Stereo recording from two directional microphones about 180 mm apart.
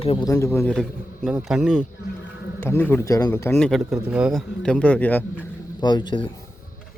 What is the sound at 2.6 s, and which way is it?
Speech, 10° left (ahead or behind).